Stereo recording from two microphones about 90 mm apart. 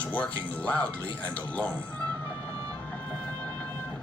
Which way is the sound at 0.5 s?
15° left (ahead or behind).